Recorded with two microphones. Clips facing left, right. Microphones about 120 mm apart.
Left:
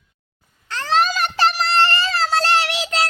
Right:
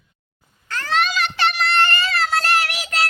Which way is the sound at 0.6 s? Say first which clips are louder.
Left 3 dB; 25° left (ahead or behind).